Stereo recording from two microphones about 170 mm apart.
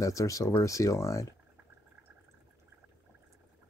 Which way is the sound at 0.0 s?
20° left (ahead or behind).